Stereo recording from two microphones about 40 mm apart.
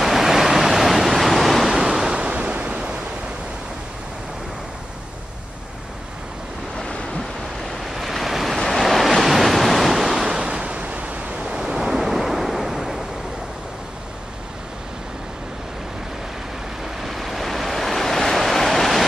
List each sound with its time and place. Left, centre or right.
0.0 s waves: centre
1.8 s waves: centre
7.8 s waves: centre
10.4 s waves: right
11.6 s waves: centre
16.8 s waves: centre